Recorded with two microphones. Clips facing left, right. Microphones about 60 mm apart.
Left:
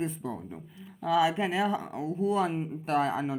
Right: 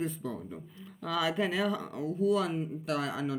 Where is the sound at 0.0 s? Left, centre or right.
Centre.